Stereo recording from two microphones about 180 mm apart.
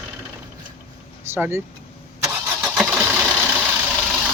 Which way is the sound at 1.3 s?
15° right (ahead or behind).